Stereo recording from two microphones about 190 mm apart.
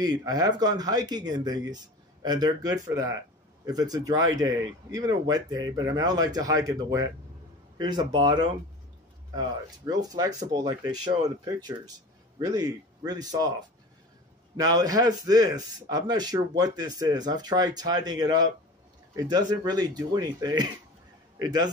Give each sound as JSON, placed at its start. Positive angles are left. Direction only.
{"t": 0.0, "sound": "speech", "side_deg": -20}
{"t": 9.8, "sound": "speech", "side_deg": -20}
{"t": 14.6, "sound": "speech", "side_deg": -20}